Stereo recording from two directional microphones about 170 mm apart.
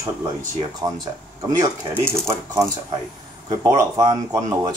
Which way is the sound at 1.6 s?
15° right (ahead or behind).